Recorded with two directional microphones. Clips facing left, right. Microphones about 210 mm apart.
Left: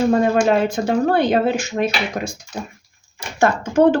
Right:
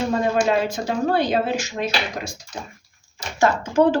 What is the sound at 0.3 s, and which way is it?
Speech, 55° left (ahead or behind).